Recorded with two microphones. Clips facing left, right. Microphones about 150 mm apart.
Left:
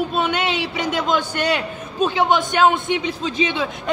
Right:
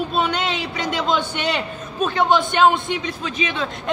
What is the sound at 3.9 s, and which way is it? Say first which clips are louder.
Speech: even; centre (ahead or behind).